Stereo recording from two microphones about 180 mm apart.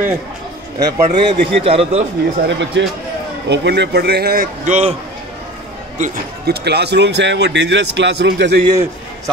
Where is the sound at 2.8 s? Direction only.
90° right.